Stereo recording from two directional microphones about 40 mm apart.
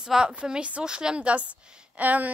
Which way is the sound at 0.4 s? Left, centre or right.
Right.